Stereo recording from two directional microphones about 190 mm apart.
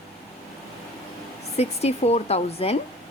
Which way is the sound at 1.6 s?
35° left (ahead or behind).